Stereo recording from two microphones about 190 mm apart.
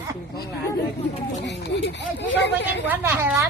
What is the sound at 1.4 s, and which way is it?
Speech, 65° left (ahead or behind).